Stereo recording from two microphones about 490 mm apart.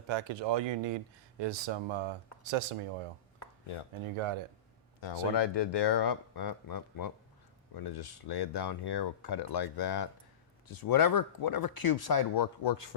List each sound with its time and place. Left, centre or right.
0.1 s speech: right
4.9 s speech: left